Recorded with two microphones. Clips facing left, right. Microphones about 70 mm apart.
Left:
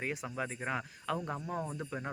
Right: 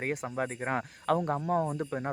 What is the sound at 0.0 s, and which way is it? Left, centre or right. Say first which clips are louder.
Speech: right 5 dB; right.